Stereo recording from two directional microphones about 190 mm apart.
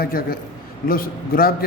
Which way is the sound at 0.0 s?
50° left (ahead or behind).